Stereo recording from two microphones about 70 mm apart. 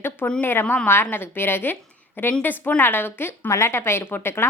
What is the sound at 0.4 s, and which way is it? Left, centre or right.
A woman's voice, left.